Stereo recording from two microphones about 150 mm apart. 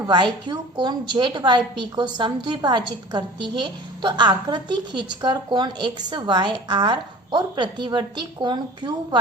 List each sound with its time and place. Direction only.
0.0 s a woman's voice: 30° right (ahead or behind)